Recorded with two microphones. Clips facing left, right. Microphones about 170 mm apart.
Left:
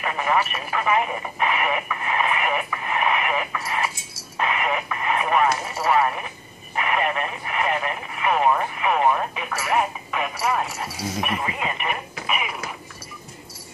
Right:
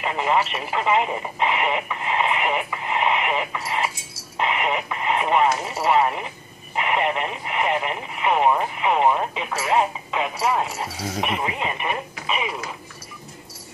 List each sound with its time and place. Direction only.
0.0 s speech: 20° right (ahead or behind)